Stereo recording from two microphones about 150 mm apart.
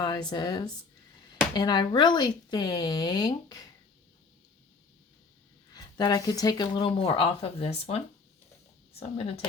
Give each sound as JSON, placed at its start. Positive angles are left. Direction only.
{"t": 0.0, "sound": "speech", "side_deg": 30}
{"t": 5.7, "sound": "speech", "side_deg": 25}